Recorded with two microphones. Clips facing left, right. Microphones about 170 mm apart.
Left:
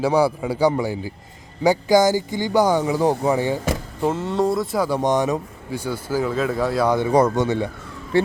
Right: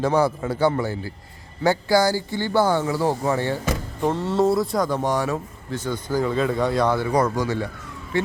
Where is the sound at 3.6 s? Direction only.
5° left (ahead or behind).